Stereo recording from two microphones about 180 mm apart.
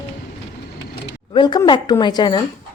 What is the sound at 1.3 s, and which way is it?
A woman's voice, 25° left (ahead or behind).